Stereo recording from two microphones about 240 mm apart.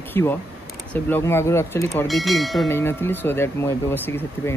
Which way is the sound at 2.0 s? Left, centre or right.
Centre.